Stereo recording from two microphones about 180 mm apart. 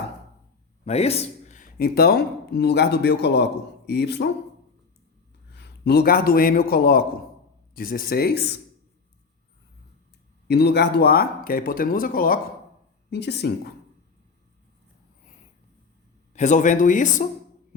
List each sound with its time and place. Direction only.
0.9 s speech: 35° left (ahead or behind); by 4.3 s 65° left (ahead or behind)
5.5 s a man's voice: 65° left (ahead or behind)
10.5 s speech: 65° left (ahead or behind)
13.1 s speech: 65° left (ahead or behind)
16.3 s speech: 45° left (ahead or behind)